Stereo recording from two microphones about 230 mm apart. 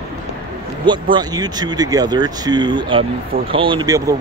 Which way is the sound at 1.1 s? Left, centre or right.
Centre.